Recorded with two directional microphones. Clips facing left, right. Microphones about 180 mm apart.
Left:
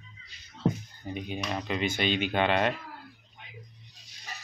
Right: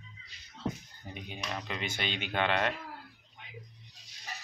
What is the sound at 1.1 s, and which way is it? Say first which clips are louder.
Speech: left 6 dB; 15° left (ahead or behind).